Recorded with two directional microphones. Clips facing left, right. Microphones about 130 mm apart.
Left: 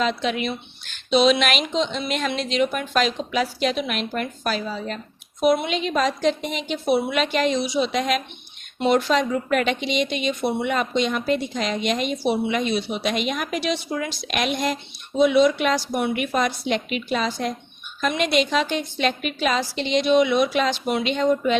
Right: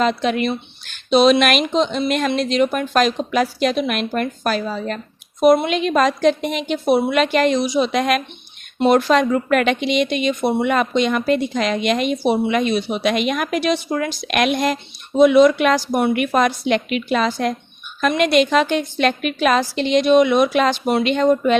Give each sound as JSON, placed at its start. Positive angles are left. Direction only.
{"t": 0.0, "sound": "speech", "side_deg": -50}
{"t": 7.3, "sound": "speech", "side_deg": -60}
{"t": 10.6, "sound": "a woman's voice", "side_deg": -65}
{"t": 21.0, "sound": "speech", "side_deg": -55}